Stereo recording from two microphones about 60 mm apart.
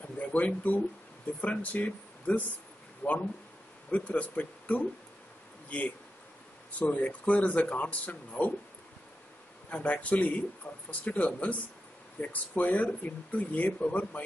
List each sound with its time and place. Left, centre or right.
0.2 s speech: left
9.7 s speech: left